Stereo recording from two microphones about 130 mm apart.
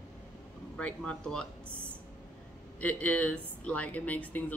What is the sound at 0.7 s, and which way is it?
Speech, 10° left (ahead or behind).